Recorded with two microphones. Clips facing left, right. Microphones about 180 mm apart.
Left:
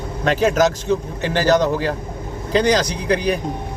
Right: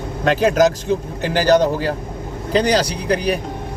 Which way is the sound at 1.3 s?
35° right (ahead or behind).